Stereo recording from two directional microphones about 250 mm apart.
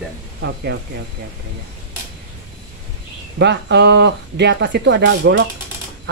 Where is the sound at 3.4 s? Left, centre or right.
Right.